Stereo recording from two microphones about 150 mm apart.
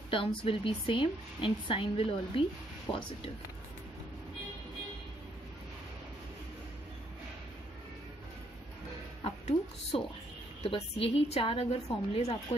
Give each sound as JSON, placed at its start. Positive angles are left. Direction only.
{"t": 0.1, "sound": "a woman's voice", "side_deg": 35}
{"t": 9.2, "sound": "a woman's voice", "side_deg": 40}